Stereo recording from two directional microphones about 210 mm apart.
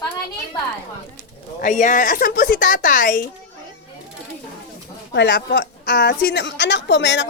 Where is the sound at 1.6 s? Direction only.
35° left (ahead or behind).